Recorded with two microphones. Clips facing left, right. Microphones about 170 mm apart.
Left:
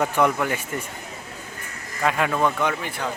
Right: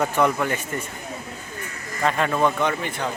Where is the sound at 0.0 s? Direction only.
10° left (ahead or behind).